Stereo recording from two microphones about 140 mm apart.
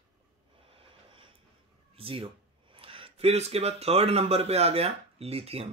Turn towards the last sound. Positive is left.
turn(degrees=-45)  # may be behind; listen again after turning